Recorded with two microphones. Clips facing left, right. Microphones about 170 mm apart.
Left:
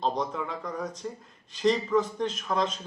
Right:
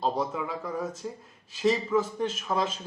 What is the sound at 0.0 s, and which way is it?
Speech, 5° right (ahead or behind).